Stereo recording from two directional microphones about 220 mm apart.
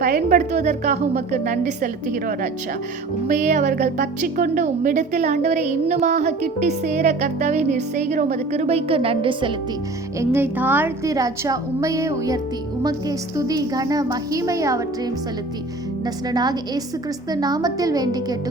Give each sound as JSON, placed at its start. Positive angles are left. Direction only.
{"t": 0.0, "sound": "a woman's voice", "side_deg": -35}
{"t": 10.2, "sound": "a woman's voice", "side_deg": -10}
{"t": 16.0, "sound": "a woman's voice", "side_deg": -20}